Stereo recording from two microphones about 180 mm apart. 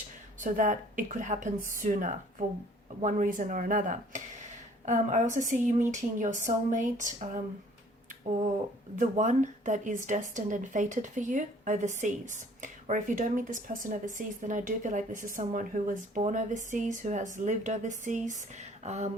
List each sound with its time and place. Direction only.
0.4 s speech: 45° right (ahead or behind)
9.0 s speech: 40° right (ahead or behind)